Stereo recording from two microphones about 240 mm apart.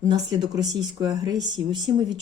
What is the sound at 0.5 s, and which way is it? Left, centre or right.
Speech, centre.